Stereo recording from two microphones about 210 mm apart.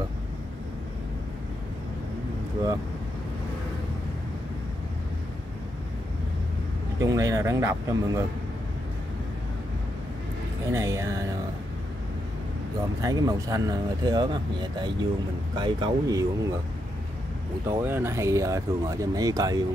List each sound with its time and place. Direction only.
7.0 s speech: 15° right (ahead or behind)
10.7 s speech: 15° right (ahead or behind)
13.0 s speech: 15° right (ahead or behind)
17.6 s speech: 10° right (ahead or behind)